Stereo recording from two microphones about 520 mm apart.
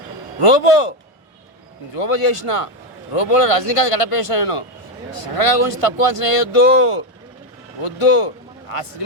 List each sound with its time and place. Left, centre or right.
0.4 s speech: left
2.0 s speech: left
3.1 s speech: left
5.1 s a man's voice: left